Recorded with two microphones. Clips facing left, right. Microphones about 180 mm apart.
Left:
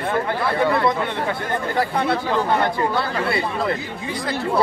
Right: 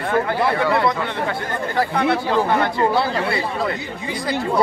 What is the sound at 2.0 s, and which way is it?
Speech, 15° right (ahead or behind).